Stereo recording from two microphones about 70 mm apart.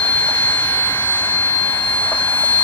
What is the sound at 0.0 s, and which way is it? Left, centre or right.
Vehicle, left.